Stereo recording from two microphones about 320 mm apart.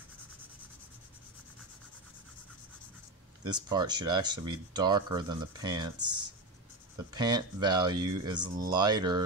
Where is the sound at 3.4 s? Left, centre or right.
Centre.